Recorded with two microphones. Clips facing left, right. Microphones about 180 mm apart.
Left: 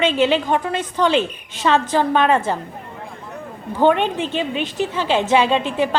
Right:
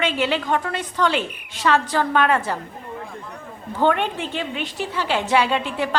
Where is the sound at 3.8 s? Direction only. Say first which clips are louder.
Left 4 dB; 20° left (ahead or behind).